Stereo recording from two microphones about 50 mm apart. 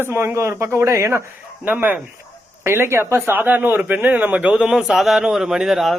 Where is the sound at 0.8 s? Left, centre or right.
Right.